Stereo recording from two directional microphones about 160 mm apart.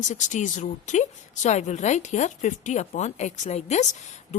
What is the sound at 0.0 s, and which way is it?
A woman's voice, 50° left (ahead or behind).